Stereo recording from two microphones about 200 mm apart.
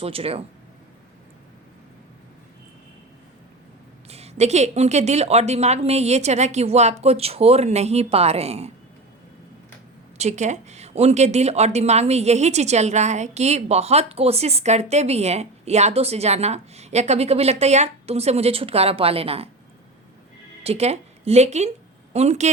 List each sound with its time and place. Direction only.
0.0 s speech: 30° right (ahead or behind)
4.1 s speech: 30° right (ahead or behind)
10.2 s speech: 35° right (ahead or behind)
20.7 s speech: 30° right (ahead or behind)